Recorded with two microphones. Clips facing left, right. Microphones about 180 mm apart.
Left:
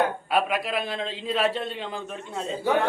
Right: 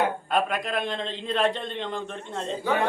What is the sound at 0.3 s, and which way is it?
A man's voice, 5° left (ahead or behind).